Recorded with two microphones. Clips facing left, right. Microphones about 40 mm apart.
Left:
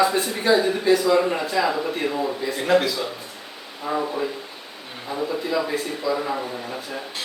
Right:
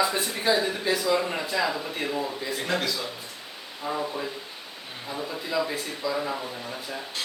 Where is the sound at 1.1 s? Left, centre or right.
Centre.